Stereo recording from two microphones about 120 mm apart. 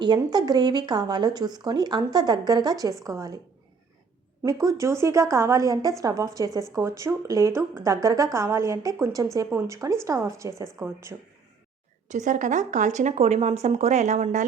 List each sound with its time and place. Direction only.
0.0 s a woman's voice: 35° right (ahead or behind)
4.4 s a woman's voice: 30° right (ahead or behind)
12.1 s speech: 90° right; by 14.4 s 75° right (ahead or behind)